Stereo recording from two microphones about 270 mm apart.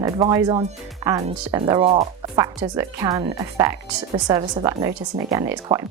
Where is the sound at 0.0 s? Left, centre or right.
Centre.